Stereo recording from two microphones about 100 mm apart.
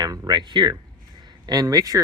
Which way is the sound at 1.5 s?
40° right (ahead or behind).